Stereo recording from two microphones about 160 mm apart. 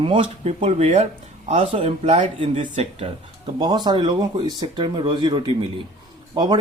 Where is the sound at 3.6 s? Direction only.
25° right (ahead or behind).